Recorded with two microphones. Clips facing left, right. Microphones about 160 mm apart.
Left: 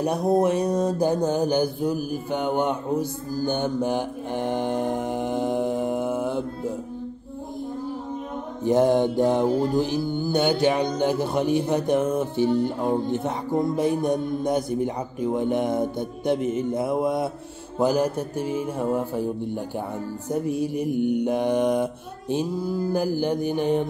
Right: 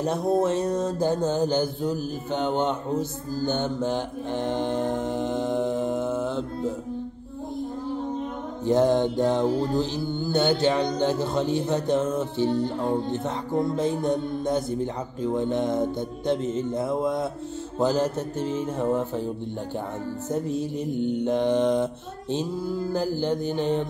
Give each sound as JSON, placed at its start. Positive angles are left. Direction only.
{"t": 0.0, "sound": "mantra", "side_deg": 15}
{"t": 8.6, "sound": "mantra", "side_deg": 15}
{"t": 20.4, "sound": "mantra", "side_deg": 15}
{"t": 22.9, "sound": "mantra", "side_deg": 15}